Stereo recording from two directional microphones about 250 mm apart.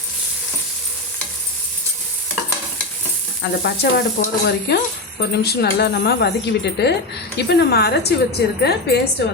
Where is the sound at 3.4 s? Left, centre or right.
Left.